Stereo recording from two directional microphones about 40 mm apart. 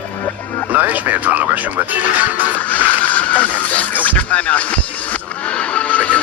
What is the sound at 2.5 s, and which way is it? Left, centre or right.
Music, left.